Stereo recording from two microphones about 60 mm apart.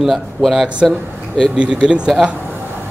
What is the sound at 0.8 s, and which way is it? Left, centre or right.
Speech, centre.